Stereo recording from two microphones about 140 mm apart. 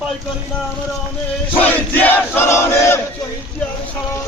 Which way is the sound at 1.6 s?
10° left (ahead or behind).